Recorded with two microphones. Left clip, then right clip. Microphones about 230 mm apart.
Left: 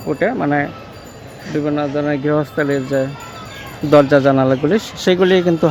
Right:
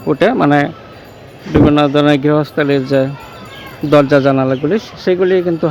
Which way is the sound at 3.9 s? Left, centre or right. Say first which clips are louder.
Right 1 dB; centre.